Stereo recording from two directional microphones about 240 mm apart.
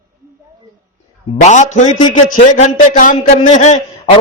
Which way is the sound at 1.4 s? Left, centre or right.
Left.